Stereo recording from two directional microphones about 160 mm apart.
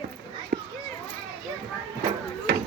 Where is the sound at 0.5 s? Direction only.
70° right (ahead or behind).